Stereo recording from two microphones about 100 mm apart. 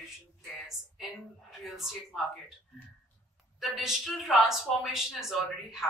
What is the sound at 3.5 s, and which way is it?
A woman's voice, 5° right (ahead or behind).